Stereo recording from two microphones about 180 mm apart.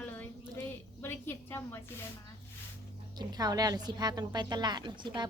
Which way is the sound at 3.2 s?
20° right (ahead or behind).